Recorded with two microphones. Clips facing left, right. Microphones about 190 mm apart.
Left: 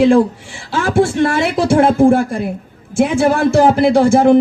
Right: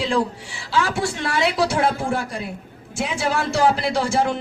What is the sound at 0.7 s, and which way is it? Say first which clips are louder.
A man's voice: left 8 dB; 50° left (ahead or behind).